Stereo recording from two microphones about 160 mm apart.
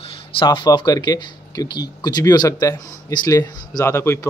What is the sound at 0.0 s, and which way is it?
Speech, 35° left (ahead or behind).